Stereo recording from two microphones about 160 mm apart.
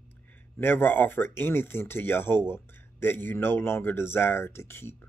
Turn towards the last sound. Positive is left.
turn(degrees=15)  # may be behind; listen again after turning